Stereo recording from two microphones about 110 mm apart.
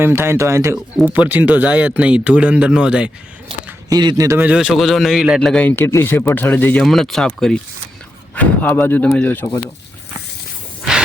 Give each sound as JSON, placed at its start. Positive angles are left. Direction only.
{"t": 0.0, "sound": "a man's voice", "side_deg": -20}
{"t": 1.0, "sound": "speech", "side_deg": -15}
{"t": 3.8, "sound": "a man's voice", "side_deg": -35}
{"t": 4.4, "sound": "speech", "side_deg": -10}
{"t": 5.4, "sound": "speech", "side_deg": 10}
{"t": 6.8, "sound": "speech", "side_deg": 0}